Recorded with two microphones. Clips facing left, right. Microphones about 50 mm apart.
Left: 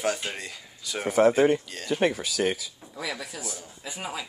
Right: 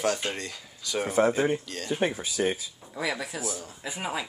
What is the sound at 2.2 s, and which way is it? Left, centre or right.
Speech, left.